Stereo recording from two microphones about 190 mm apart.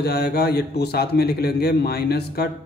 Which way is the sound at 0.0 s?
55° left (ahead or behind).